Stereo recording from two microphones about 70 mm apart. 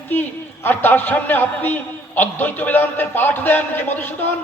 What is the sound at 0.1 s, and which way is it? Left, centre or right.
A man's voice, left.